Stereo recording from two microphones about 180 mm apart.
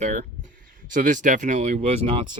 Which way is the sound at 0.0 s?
45° right (ahead or behind).